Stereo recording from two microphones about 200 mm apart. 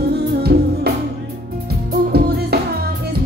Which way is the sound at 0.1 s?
50° right (ahead or behind).